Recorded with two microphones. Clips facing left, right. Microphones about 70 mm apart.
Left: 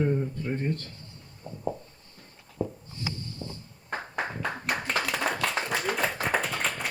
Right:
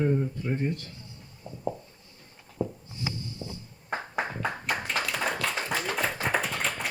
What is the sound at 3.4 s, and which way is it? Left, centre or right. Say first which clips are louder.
Music: left 1 dB; left.